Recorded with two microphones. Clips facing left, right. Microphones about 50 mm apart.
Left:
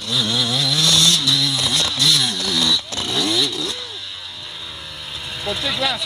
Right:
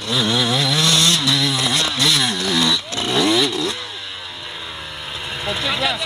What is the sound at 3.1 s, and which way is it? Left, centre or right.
Motorcycle, centre.